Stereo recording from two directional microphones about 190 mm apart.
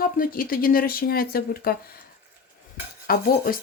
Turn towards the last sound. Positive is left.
turn(degrees=50)  # may be behind; listen again after turning